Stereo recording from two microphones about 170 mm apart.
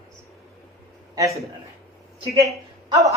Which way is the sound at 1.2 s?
15° right (ahead or behind).